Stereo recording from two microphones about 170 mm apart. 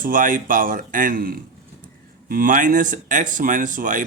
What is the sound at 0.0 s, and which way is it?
Speech, 50° right (ahead or behind).